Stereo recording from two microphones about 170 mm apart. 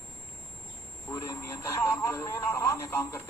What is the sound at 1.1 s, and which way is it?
Speech, 15° left (ahead or behind).